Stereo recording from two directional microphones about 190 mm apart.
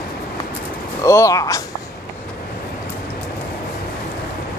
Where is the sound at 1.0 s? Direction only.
15° left (ahead or behind).